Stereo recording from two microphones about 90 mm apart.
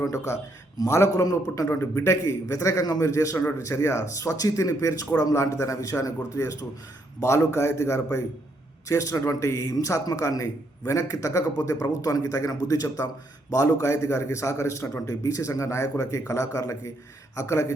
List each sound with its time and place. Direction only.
0.0 s a man's voice: 35° left (ahead or behind)